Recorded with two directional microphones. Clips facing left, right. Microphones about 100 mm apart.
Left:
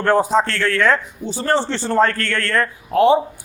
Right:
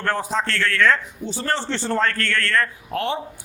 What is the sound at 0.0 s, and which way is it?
A man's voice, 15° left (ahead or behind).